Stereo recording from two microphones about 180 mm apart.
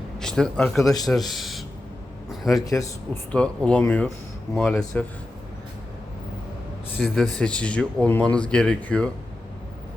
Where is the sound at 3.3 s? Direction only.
5° left (ahead or behind).